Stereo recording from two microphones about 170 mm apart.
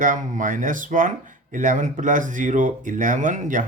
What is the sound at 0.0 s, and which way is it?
Speech, 50° right (ahead or behind).